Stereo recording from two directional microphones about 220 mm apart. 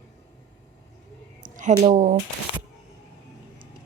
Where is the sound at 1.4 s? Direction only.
35° right (ahead or behind).